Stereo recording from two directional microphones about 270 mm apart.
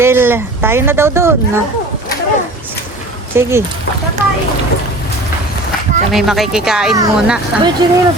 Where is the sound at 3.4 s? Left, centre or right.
Centre.